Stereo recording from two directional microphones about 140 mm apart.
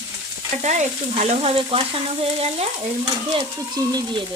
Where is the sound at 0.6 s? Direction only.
55° right (ahead or behind).